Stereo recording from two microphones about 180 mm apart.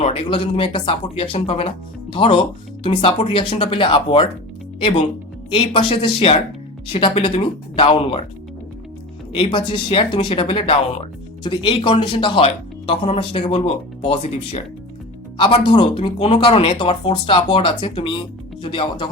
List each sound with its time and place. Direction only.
0.0 s speech: 30° left (ahead or behind)
9.3 s speech: 25° left (ahead or behind)